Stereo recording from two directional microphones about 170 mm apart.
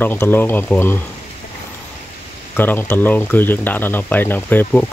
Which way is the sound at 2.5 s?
10° left (ahead or behind).